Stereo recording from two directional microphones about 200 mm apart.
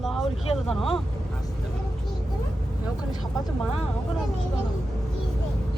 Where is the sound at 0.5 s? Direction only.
Centre (ahead or behind).